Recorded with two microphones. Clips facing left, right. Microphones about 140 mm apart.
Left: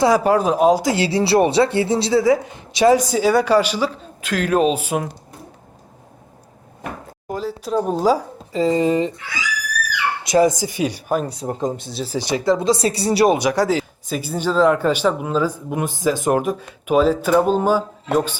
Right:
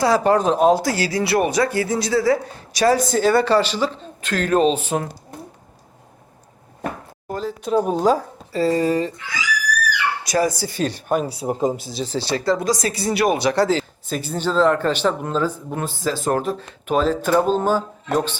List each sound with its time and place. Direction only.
0.2 s speech: 5° left (ahead or behind)
7.3 s speech: 10° left (ahead or behind)
7.7 s speech: 5° right (ahead or behind)
8.5 s speech: 20° left (ahead or behind)
10.2 s speech: 20° left (ahead or behind)
11.1 s speech: 5° right (ahead or behind)
12.1 s speech: 15° left (ahead or behind); by 13.3 s 35° left (ahead or behind)
13.3 s speech: 15° left (ahead or behind)